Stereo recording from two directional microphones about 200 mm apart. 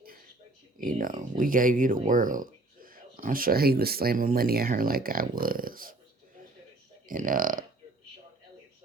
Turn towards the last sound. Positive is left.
turn(degrees=-45)  # may be behind; listen again after turning